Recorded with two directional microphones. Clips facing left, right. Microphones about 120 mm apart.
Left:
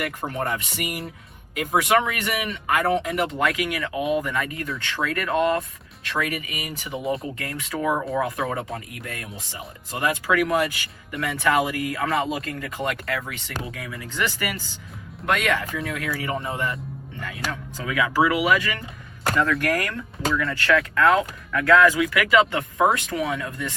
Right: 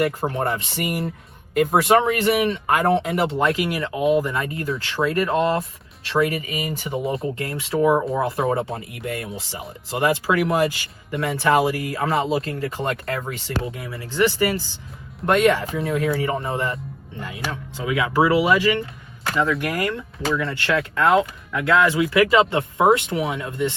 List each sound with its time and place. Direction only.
0.0 s speech: 40° right (ahead or behind)
17.5 s speech: 25° right (ahead or behind)
19.4 s speech: 15° right (ahead or behind)